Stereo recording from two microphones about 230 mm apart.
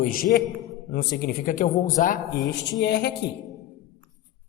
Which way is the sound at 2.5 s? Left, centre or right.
Left.